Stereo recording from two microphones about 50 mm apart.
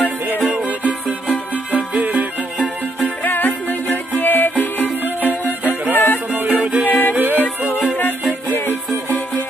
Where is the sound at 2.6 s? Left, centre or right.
Left.